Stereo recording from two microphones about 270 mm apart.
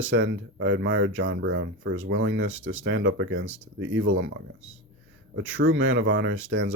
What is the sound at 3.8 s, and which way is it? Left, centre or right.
Speech, right.